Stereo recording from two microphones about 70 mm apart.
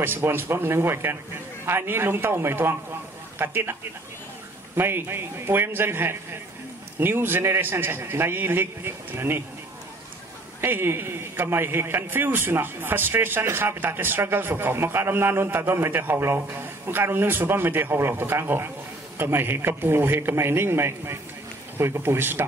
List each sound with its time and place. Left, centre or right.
0.0 s a man's voice: right
4.7 s a man's voice: right
10.6 s a man's voice: right